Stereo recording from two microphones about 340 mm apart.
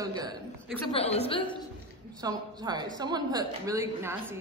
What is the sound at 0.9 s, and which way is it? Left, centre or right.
Speech, centre.